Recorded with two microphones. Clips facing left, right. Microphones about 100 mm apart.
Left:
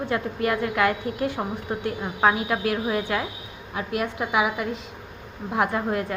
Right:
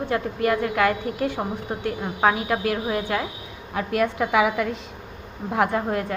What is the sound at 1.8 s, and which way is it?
A woman's voice, 45° right (ahead or behind).